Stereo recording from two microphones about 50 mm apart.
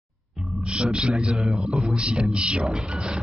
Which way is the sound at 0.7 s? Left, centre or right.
Centre.